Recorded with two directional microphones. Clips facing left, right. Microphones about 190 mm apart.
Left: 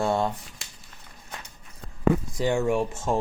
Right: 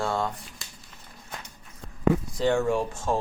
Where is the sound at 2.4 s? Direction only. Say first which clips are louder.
Even; 15° left (ahead or behind).